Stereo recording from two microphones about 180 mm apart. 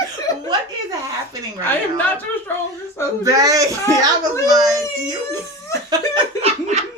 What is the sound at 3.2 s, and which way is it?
A child's voice, 20° right (ahead or behind).